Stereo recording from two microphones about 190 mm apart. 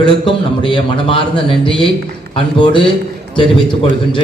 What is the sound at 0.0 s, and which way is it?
A man's voice, 25° left (ahead or behind).